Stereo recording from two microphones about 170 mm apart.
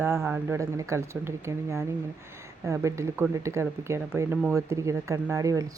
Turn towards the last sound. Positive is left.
turn(degrees=-20)  # may be behind; listen again after turning